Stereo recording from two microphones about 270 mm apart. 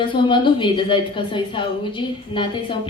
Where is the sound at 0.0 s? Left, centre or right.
Centre.